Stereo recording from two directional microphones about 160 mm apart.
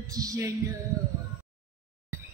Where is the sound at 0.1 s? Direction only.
20° right (ahead or behind).